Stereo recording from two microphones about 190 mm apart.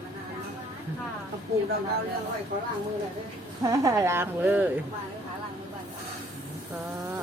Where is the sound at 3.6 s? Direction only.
15° right (ahead or behind).